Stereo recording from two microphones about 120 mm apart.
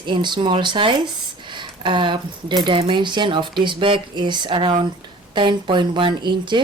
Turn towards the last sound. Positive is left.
turn(degrees=-40)  # may be behind; listen again after turning